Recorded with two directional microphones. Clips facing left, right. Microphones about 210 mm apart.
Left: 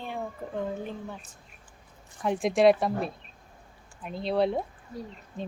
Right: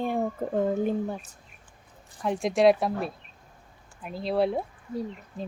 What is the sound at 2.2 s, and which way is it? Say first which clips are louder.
Speech: even; centre (ahead or behind).